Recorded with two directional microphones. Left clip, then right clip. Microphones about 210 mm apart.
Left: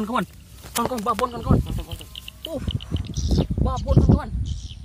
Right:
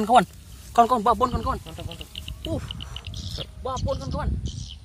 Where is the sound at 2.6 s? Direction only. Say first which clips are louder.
Left 3 dB; 20° right (ahead or behind).